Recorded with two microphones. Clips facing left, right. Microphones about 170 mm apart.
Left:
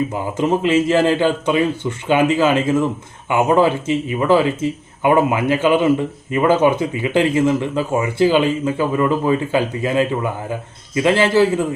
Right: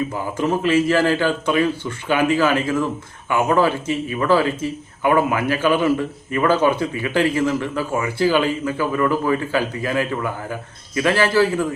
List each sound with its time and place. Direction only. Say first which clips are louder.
0.1 s a man's voice: left 3 dB; 20° left (ahead or behind)